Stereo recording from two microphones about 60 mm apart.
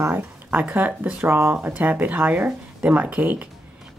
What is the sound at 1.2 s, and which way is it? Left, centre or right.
Speech, right.